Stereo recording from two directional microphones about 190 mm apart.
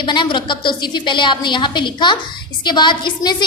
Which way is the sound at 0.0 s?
25° left (ahead or behind).